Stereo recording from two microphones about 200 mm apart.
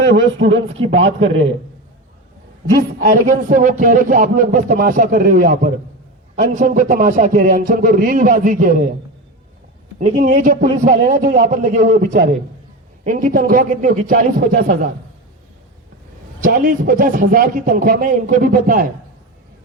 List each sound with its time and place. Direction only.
0.1 s a man's voice: 65° right (ahead or behind)
3.0 s a man's voice: 40° right (ahead or behind)
10.2 s a man's voice: 40° right (ahead or behind)
16.4 s a man's voice: 45° right (ahead or behind)